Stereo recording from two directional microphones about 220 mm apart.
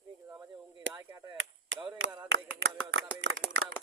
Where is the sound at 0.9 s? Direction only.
10° right (ahead or behind).